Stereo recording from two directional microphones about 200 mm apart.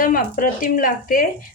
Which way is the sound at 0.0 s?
45° left (ahead or behind).